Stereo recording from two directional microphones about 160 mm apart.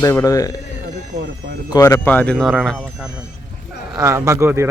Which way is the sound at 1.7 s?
20° left (ahead or behind).